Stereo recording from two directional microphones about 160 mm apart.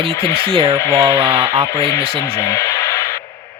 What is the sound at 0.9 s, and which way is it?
Speech, 15° right (ahead or behind).